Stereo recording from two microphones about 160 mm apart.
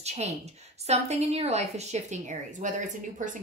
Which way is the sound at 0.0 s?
45° right (ahead or behind).